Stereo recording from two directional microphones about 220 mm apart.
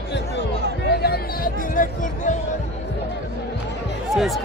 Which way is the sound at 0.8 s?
45° left (ahead or behind).